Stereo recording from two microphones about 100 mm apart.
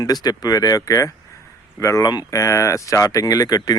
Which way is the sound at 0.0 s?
40° left (ahead or behind).